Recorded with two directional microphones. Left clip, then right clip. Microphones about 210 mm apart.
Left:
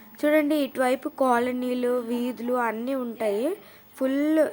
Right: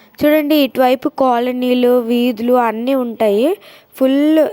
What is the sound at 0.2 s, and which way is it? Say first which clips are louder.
Speech: right 10 dB; 35° right (ahead or behind).